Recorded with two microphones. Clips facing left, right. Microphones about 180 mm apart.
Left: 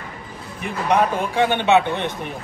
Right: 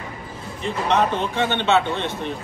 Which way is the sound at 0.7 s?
10° left (ahead or behind).